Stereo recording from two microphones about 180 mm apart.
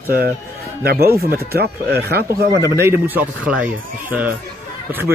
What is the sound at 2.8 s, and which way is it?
Speech, 10° right (ahead or behind).